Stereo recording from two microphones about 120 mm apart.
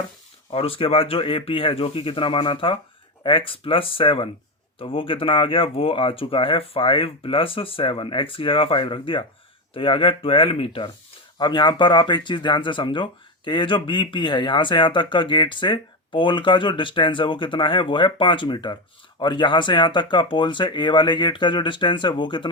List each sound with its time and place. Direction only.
0.5 s speech: 55° left (ahead or behind)